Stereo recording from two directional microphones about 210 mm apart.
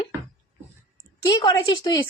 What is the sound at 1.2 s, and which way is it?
Speech, 20° left (ahead or behind).